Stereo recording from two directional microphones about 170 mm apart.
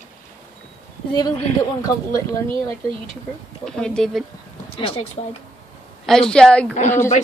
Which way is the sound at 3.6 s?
5° left (ahead or behind).